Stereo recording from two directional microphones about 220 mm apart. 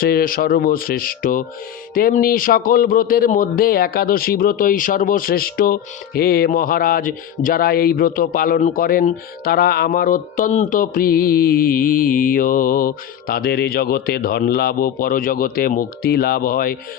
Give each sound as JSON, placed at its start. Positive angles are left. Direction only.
{"t": 0.0, "sound": "speech", "side_deg": 40}